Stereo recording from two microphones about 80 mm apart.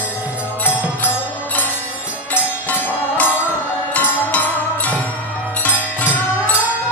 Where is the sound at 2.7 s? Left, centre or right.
Left.